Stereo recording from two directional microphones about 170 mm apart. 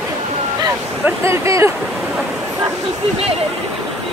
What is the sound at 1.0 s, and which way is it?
Speech, 15° right (ahead or behind).